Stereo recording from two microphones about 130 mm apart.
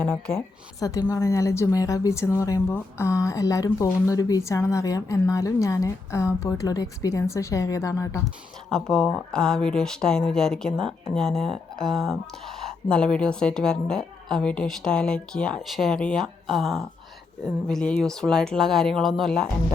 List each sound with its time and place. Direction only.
0.0 s speech: 5° left (ahead or behind)
0.8 s speech: 25° left (ahead or behind)
8.7 s speech: 5° left (ahead or behind)